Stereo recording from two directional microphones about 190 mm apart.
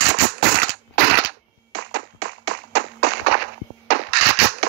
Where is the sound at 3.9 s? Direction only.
60° right (ahead or behind).